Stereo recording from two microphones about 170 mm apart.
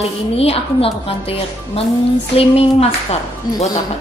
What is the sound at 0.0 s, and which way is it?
A woman's voice, 35° left (ahead or behind).